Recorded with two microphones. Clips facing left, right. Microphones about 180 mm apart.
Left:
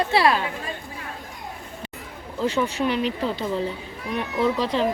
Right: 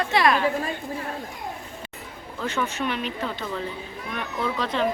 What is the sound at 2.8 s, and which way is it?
Speech, 25° left (ahead or behind).